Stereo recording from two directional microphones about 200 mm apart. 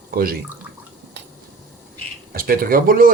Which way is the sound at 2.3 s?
45° right (ahead or behind).